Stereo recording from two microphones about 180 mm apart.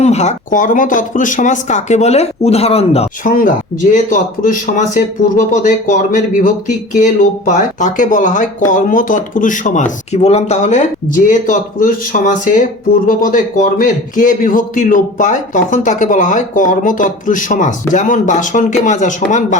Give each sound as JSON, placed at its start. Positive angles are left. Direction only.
{"t": 0.0, "sound": "speech", "side_deg": 40}
{"t": 3.2, "sound": "speech", "side_deg": 50}